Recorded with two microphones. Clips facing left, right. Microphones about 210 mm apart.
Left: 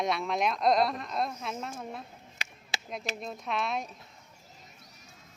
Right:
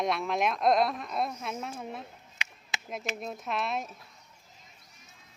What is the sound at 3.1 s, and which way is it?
Speech, 5° right (ahead or behind).